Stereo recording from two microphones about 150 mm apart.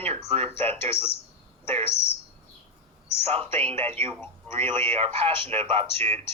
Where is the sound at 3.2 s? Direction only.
40° right (ahead or behind).